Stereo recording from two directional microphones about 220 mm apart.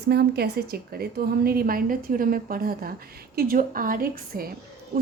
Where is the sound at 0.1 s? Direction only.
45° right (ahead or behind).